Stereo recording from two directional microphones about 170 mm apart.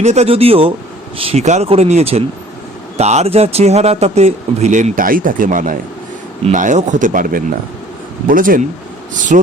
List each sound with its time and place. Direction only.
0.0 s speech: 40° right (ahead or behind)